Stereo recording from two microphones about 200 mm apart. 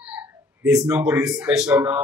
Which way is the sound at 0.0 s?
5° right (ahead or behind).